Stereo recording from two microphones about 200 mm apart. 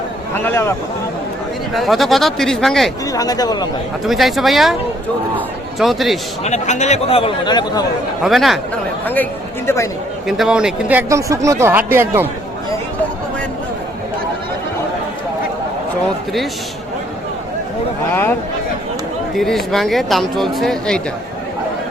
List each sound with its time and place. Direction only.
0.3 s speech: 10° left (ahead or behind)
1.7 s speech: centre (ahead or behind)
3.1 s speech: 20° left (ahead or behind)
4.0 s speech: centre (ahead or behind)
5.8 s speech: centre (ahead or behind)
6.4 s speech: 35° left (ahead or behind)
8.2 s speech: centre (ahead or behind)
9.6 s speech: 15° left (ahead or behind)
10.2 s speech: centre (ahead or behind)
18.1 s speech: 10° left (ahead or behind)
19.4 s speech: centre (ahead or behind)